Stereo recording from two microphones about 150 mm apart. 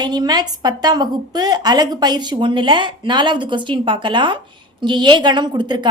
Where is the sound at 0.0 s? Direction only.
25° right (ahead or behind).